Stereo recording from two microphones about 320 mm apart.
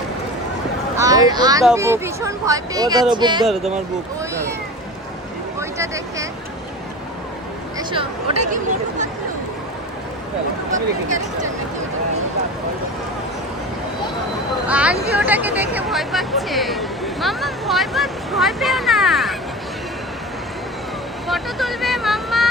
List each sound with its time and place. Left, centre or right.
0.9 s speech: centre
3.4 s speech: centre
5.5 s speech: centre
7.8 s speech: centre
10.7 s speech: right
14.7 s speech: centre
21.2 s vehicle: centre